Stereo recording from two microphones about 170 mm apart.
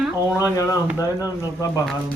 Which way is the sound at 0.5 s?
20° left (ahead or behind).